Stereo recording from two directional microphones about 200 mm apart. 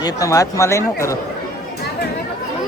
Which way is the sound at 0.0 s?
15° left (ahead or behind).